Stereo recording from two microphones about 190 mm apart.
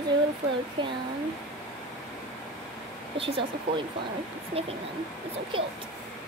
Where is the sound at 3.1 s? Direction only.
30° right (ahead or behind).